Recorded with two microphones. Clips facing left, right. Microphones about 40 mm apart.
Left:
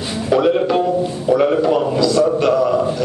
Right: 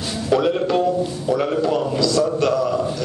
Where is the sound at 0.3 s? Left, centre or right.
Centre.